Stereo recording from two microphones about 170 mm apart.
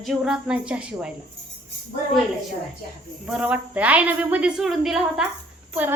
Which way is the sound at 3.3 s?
5° right (ahead or behind).